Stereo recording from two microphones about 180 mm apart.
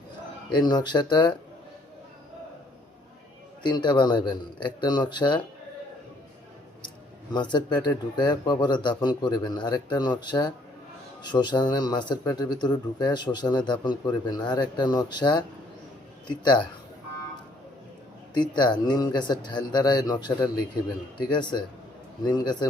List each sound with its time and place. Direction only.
0.5 s a man's voice: 25° left (ahead or behind)
3.6 s a man's voice: 25° left (ahead or behind)
7.3 s a man's voice: 25° left (ahead or behind)
18.3 s a man's voice: 25° left (ahead or behind)